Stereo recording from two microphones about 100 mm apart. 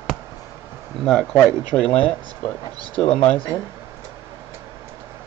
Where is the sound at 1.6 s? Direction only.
15° left (ahead or behind).